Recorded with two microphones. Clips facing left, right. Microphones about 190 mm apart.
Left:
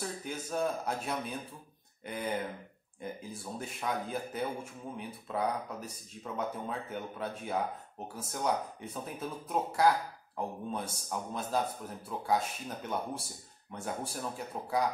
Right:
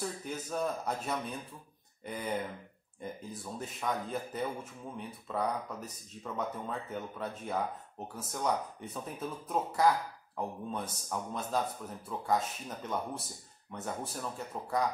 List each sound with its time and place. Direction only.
0.0 s speech: 5° left (ahead or behind)